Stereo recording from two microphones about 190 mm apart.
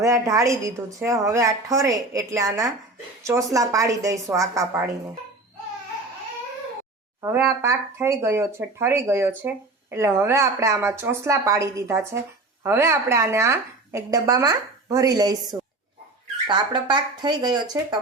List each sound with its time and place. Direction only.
0.0 s speech: 15° right (ahead or behind)
7.2 s speech: 15° right (ahead or behind)